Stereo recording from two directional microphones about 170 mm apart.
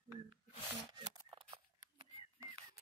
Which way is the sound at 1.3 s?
30° right (ahead or behind).